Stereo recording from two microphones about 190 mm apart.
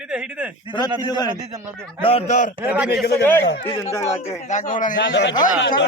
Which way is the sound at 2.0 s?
30° left (ahead or behind).